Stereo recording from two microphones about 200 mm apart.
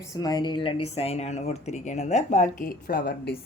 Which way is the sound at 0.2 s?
20° left (ahead or behind).